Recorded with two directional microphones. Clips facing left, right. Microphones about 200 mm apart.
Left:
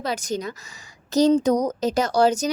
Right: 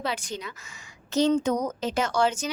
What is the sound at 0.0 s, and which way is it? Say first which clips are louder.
A woman's voice: left 5 dB; 40° left (ahead or behind).